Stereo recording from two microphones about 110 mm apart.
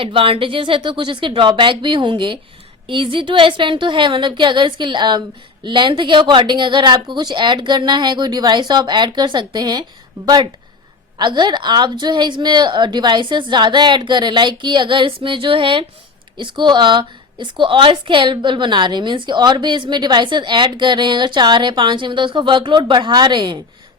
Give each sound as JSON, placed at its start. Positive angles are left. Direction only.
{"t": 0.0, "sound": "a woman's voice", "side_deg": -55}